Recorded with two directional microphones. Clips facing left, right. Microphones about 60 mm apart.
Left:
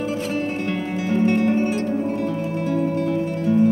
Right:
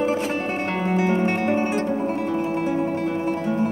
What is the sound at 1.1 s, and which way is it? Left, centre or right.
Music, right.